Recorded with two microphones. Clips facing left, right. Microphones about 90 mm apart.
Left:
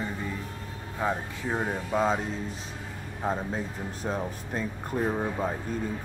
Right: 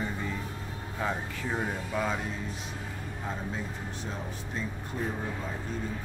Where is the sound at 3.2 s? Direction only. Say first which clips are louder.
Left 7 dB; 45° left (ahead or behind).